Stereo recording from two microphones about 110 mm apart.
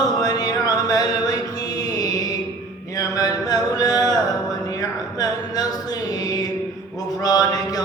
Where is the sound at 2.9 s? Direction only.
35° left (ahead or behind).